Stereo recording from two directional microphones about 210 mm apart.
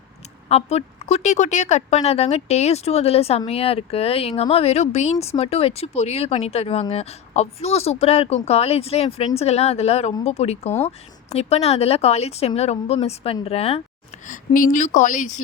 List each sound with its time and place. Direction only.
0.4 s a woman's voice: 30° left (ahead or behind)
14.3 s speech: 40° left (ahead or behind)